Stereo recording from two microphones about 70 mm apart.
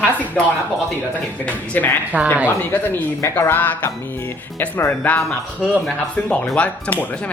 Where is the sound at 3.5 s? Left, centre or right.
Left.